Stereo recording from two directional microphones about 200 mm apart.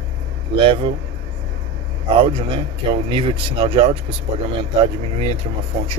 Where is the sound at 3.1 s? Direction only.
30° right (ahead or behind).